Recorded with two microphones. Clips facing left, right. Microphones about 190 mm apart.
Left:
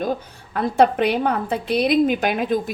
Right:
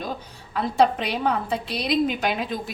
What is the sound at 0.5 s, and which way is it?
A woman's voice, 55° left (ahead or behind).